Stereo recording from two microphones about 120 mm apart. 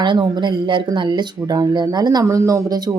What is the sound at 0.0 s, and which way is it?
Speech, 40° right (ahead or behind).